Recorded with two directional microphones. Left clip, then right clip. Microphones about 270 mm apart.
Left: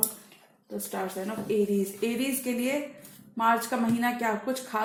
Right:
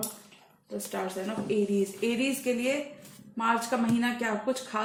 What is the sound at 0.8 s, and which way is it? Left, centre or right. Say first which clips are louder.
Speech: even; left.